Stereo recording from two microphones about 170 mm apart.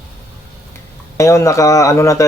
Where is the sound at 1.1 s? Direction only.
15° left (ahead or behind).